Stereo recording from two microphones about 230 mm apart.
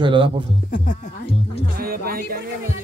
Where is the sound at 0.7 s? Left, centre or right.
Left.